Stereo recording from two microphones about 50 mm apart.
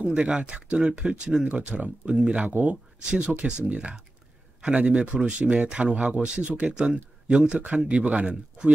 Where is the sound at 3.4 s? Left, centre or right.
Right.